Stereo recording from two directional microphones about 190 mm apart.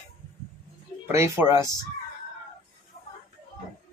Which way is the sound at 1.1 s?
15° right (ahead or behind).